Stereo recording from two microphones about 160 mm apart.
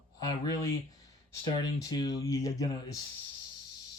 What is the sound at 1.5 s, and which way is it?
Speech, 25° left (ahead or behind).